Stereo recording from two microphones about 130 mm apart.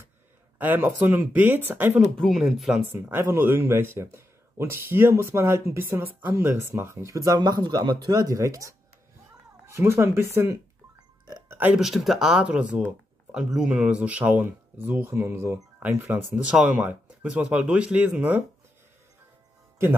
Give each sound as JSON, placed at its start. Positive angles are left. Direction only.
{"t": 0.6, "sound": "speech", "side_deg": -15}
{"t": 2.0, "sound": "speech", "side_deg": 0}
{"t": 2.8, "sound": "speech", "side_deg": -15}
{"t": 11.2, "sound": "music", "side_deg": -30}
{"t": 11.5, "sound": "a sound", "side_deg": -15}
{"t": 11.8, "sound": "speech", "side_deg": 0}